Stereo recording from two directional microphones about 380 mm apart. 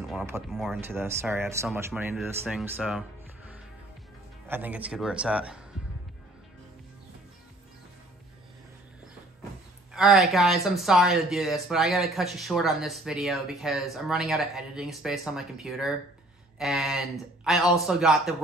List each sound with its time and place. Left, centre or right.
0.1 s speech: centre
9.9 s speech: centre